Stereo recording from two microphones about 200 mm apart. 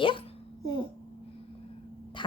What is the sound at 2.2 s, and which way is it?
Music, 25° left (ahead or behind).